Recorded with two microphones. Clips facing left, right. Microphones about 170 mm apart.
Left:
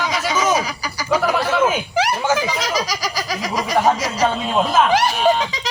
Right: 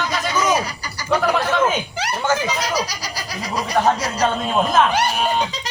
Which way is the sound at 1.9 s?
90° left.